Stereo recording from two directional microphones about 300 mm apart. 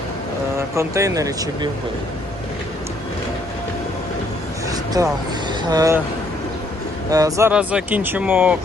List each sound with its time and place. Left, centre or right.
0.8 s speech: centre
5.0 s speech: centre
7.1 s speech: centre